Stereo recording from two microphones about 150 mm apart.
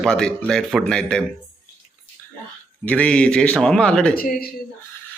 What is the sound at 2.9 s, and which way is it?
A man's voice, 10° left (ahead or behind).